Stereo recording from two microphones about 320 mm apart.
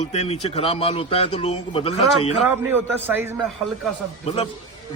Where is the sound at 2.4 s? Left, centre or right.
Centre.